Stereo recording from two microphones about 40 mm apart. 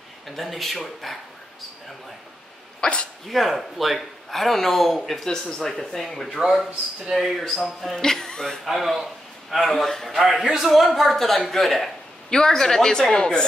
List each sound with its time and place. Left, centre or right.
0.4 s speech: centre
2.8 s dog: left
3.3 s speech: centre
5.2 s speech: centre
8.6 s speech: centre
9.7 s speech: centre
12.3 s speech: centre